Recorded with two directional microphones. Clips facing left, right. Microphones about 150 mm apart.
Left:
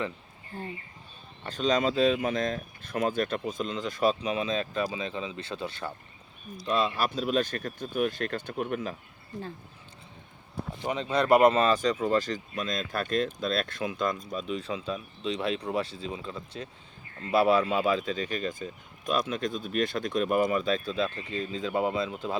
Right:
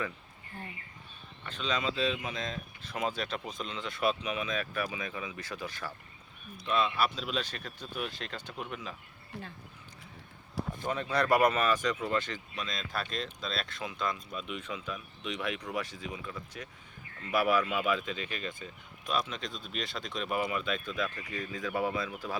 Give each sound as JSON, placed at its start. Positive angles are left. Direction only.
{"t": 1.5, "sound": "speech", "side_deg": 40}
{"t": 10.8, "sound": "speech", "side_deg": 20}